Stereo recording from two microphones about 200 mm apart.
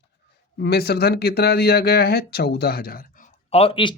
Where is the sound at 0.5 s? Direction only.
55° left (ahead or behind).